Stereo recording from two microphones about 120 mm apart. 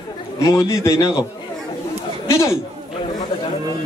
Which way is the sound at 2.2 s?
25° left (ahead or behind).